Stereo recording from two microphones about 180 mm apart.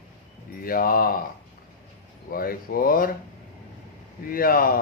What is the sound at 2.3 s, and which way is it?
Speech, 55° left (ahead or behind).